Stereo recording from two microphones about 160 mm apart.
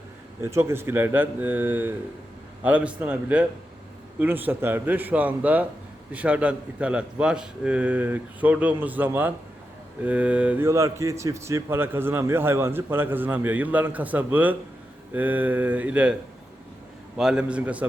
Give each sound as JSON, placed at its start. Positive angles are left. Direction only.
{"t": 0.4, "sound": "speech", "side_deg": -15}
{"t": 17.2, "sound": "speech", "side_deg": -5}